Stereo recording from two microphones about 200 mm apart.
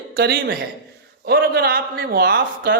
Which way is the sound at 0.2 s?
60° right (ahead or behind).